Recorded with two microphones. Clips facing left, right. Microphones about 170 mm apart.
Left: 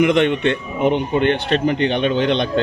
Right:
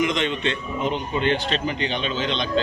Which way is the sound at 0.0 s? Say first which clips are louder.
Left 8 dB; 60° left (ahead or behind).